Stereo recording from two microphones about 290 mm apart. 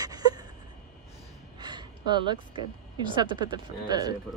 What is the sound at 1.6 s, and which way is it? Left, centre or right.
A woman's voice, centre.